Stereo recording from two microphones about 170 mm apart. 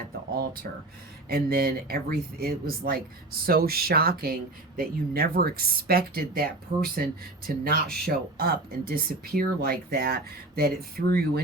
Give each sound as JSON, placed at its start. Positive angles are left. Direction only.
{"t": 1.3, "sound": "speech", "side_deg": -65}